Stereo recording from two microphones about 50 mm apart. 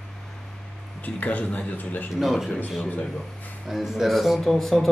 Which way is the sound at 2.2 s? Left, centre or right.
Centre.